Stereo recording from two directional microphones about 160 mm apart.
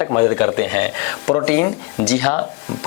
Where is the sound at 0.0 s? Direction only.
15° left (ahead or behind).